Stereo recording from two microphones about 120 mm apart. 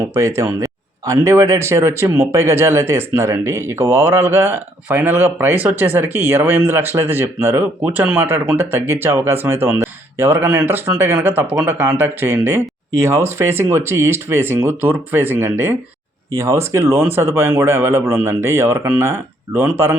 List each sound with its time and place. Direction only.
0.0 s speech: 25° right (ahead or behind)